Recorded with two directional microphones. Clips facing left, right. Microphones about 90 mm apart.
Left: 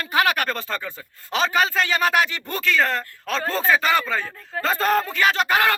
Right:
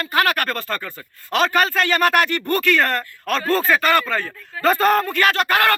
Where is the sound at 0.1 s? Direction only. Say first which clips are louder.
Right 1 dB; 10° left (ahead or behind).